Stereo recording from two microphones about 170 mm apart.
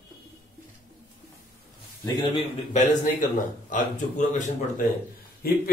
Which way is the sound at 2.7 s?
50° left (ahead or behind).